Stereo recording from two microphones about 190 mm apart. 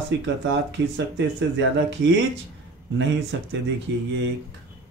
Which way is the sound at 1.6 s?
75° right (ahead or behind).